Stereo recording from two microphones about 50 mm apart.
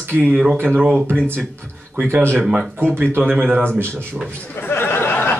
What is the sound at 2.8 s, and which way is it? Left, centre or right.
Speech, right.